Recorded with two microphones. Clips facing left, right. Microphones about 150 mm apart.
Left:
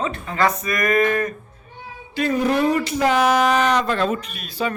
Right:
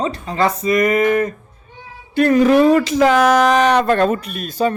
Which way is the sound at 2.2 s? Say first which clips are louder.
Right 8 dB; 80° right.